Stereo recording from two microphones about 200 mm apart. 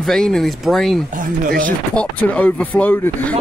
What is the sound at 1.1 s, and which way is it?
Speech, 40° right (ahead or behind).